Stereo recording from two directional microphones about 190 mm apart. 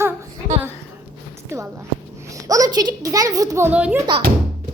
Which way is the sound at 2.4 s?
20° right (ahead or behind).